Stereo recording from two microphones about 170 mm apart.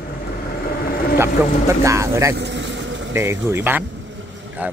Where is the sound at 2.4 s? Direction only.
90° right.